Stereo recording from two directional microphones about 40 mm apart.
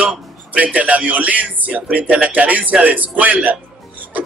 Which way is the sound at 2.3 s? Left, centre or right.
Right.